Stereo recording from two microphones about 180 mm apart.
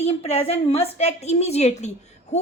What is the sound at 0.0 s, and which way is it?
A woman's voice, 35° left (ahead or behind).